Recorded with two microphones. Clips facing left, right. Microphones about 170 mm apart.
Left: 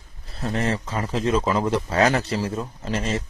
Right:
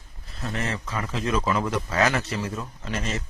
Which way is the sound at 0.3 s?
35° left (ahead or behind).